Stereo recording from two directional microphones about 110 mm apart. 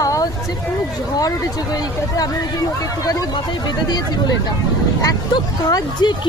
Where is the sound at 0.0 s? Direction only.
30° left (ahead or behind).